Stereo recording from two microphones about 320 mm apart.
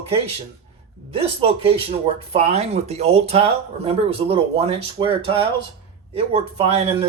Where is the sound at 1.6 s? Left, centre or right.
Centre.